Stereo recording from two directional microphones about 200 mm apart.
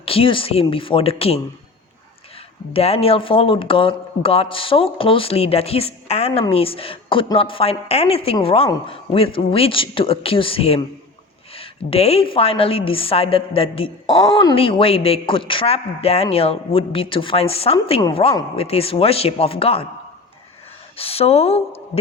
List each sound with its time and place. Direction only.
0.0 s a woman's voice: 30° left (ahead or behind)
2.7 s a woman's voice: 30° left (ahead or behind)
20.9 s a woman's voice: 30° left (ahead or behind)